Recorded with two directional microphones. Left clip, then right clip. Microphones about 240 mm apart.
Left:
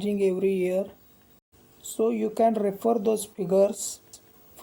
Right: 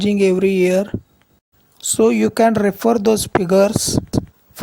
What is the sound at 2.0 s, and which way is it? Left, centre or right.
Speech, right.